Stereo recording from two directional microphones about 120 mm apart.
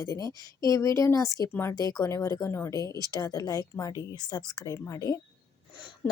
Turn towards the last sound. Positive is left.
turn(degrees=25)  # may be behind; listen again after turning